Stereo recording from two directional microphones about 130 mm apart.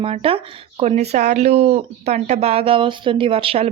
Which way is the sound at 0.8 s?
60° right (ahead or behind).